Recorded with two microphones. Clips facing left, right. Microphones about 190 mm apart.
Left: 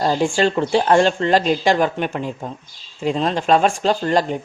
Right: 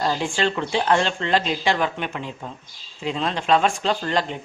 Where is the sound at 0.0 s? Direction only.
45° left (ahead or behind).